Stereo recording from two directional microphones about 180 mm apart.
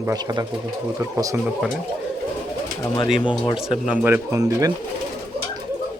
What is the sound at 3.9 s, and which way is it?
Speech, 10° right (ahead or behind).